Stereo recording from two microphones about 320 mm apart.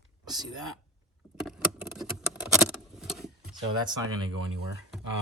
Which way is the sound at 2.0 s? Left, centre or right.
Centre.